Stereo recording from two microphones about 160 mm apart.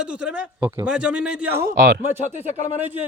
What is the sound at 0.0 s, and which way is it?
A man's voice, 5° right (ahead or behind).